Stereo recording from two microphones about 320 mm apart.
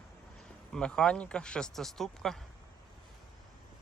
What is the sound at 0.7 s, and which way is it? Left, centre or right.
Speech, centre.